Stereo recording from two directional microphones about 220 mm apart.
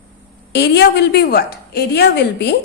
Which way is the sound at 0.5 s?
50° left (ahead or behind).